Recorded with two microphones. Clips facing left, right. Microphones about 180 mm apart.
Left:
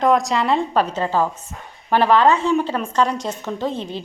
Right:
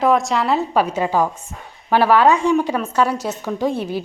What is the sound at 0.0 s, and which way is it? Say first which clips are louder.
A woman's voice: even; centre (ahead or behind).